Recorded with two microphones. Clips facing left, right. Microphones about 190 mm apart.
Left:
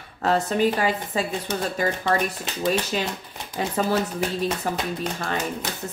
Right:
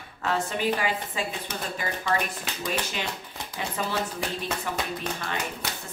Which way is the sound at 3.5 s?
40° left (ahead or behind).